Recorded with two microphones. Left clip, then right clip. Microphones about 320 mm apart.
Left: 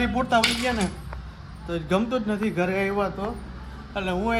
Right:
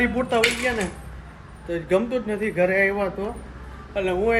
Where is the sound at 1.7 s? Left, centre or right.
Centre.